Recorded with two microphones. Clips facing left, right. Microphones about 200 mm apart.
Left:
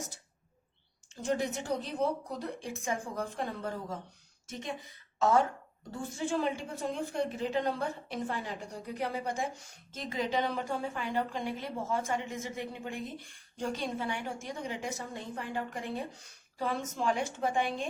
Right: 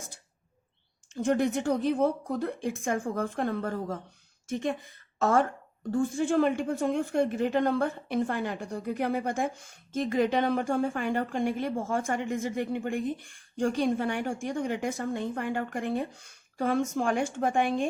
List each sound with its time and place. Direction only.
1.1 s a woman's voice: 55° right (ahead or behind)